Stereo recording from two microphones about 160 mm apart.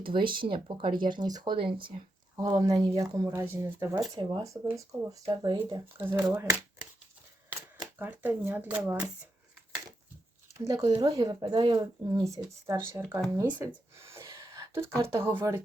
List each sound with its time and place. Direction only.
0.0 s speech: 30° right (ahead or behind); by 4.0 s 15° right (ahead or behind)
4.1 s speech: 25° right (ahead or behind)
6.0 s speech: 15° right (ahead or behind)
7.9 s speech: 10° right (ahead or behind)
10.6 s speech: 20° right (ahead or behind)
14.1 s a sound: 15° right (ahead or behind)